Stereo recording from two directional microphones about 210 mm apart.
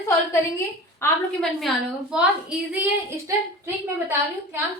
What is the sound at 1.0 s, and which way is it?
Speech, 10° left (ahead or behind).